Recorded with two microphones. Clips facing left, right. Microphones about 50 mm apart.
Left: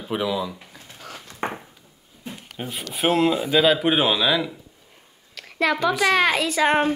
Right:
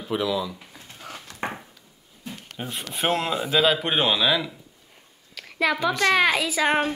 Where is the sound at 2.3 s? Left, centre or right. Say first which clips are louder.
Left 1 dB; centre.